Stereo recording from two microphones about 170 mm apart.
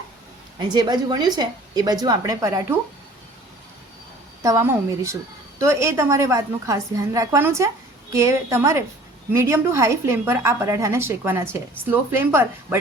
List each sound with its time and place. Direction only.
0.6 s a woman's voice: 25° right (ahead or behind)
4.4 s a woman's voice: 15° right (ahead or behind)